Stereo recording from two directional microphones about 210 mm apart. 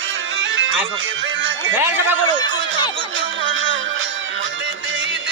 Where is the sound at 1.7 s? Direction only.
10° right (ahead or behind).